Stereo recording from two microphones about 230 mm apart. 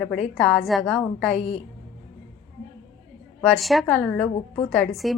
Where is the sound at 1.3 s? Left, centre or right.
Left.